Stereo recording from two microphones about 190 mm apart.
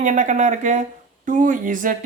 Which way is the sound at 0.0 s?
40° right (ahead or behind).